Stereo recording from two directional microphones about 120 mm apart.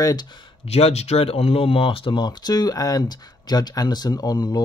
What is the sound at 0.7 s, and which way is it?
Speech, 60° left (ahead or behind).